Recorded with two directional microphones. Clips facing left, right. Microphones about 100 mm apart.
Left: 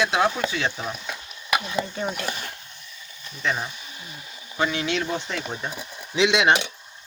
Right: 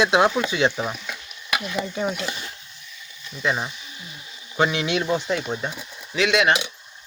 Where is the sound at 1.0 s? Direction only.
30° left (ahead or behind).